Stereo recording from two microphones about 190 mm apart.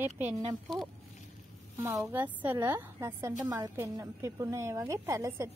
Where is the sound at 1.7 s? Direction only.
15° right (ahead or behind).